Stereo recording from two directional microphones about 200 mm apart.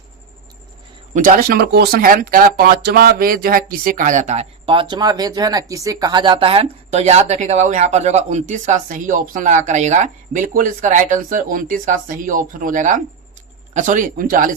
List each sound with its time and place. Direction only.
1.1 s speech: 40° right (ahead or behind)